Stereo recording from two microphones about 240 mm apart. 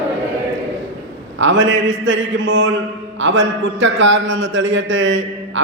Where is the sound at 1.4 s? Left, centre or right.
Right.